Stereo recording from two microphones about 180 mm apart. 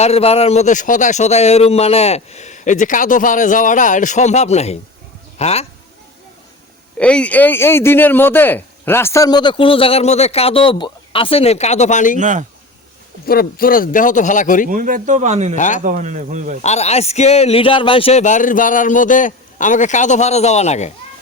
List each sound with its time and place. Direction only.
0.0 s speech: 35° left (ahead or behind)
7.0 s speech: 5° left (ahead or behind); by 12.2 s 45° left (ahead or behind)
12.2 s speech: 45° right (ahead or behind)
13.2 s speech: 55° left (ahead or behind)
14.7 s speech: 50° right (ahead or behind)
15.5 s speech: 45° left (ahead or behind)
15.8 s speech: 45° right (ahead or behind)
16.6 s speech: 40° left (ahead or behind)